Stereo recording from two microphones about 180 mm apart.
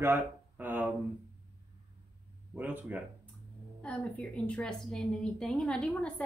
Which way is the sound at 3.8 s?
5° left (ahead or behind).